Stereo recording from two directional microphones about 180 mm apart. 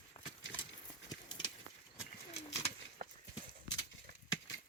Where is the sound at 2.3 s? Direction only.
35° left (ahead or behind).